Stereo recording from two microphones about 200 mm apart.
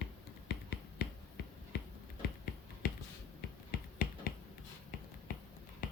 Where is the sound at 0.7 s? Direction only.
55° left (ahead or behind).